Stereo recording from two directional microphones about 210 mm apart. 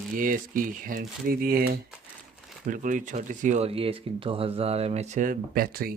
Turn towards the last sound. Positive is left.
turn(degrees=-45)  # may be behind; listen again after turning